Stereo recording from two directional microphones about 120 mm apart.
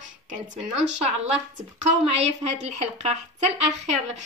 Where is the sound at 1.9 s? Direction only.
65° right (ahead or behind).